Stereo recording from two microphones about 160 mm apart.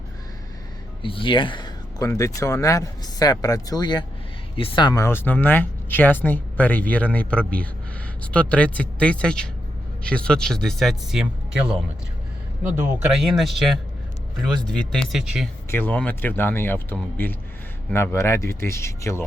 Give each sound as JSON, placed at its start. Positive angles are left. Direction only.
{"t": 1.0, "sound": "speech", "side_deg": 30}
{"t": 5.0, "sound": "speech", "side_deg": 10}
{"t": 12.6, "sound": "speech", "side_deg": -5}
{"t": 15.7, "sound": "speech", "side_deg": 10}